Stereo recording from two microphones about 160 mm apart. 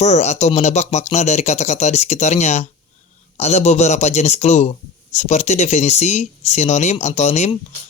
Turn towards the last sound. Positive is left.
turn(degrees=45)  # may be behind; listen again after turning